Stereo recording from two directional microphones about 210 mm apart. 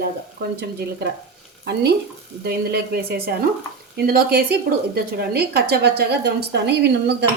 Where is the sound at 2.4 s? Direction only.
50° right (ahead or behind).